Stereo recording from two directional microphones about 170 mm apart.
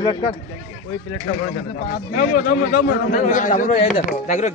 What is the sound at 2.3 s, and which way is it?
A man's voice, 55° left (ahead or behind).